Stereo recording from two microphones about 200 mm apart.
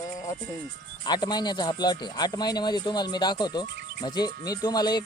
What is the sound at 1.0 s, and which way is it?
Speech, 20° left (ahead or behind).